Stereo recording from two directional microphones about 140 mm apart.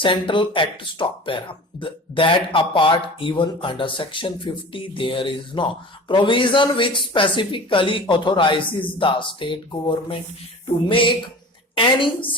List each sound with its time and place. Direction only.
0.0 s speech: 35° left (ahead or behind)